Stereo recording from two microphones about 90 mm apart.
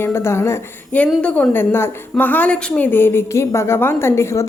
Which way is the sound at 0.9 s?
15° left (ahead or behind).